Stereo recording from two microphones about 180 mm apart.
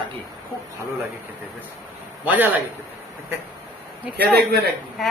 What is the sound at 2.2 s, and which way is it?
Speech, 10° right (ahead or behind).